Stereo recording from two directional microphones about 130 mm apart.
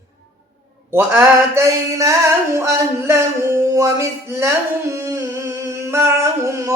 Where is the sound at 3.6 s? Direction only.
25° right (ahead or behind).